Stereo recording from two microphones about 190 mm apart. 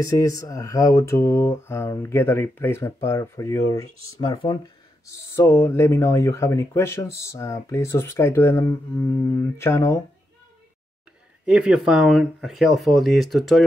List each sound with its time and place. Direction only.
0.0 s speech: 20° left (ahead or behind)
11.4 s speech: 5° right (ahead or behind)